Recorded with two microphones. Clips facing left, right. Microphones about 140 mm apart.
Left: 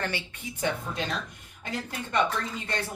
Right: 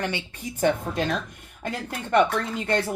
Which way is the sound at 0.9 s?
65° right (ahead or behind).